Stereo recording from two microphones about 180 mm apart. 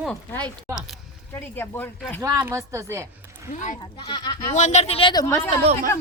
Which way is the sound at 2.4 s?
15° right (ahead or behind).